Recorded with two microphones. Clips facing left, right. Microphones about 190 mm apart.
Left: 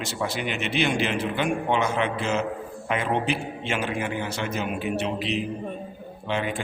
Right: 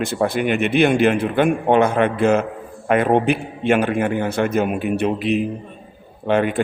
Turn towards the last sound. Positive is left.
turn(degrees=-55)  # may be behind; listen again after turning